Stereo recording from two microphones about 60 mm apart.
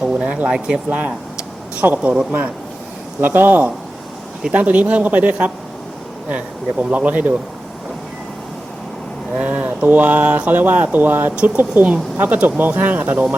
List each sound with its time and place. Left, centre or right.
0.2 s speech: centre
3.2 s a man's voice: right
9.4 s a man's voice: right